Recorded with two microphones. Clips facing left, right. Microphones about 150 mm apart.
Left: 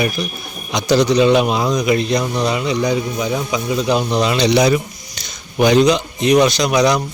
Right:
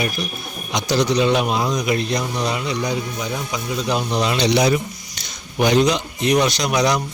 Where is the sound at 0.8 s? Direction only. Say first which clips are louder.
Left 5 dB; 90° left.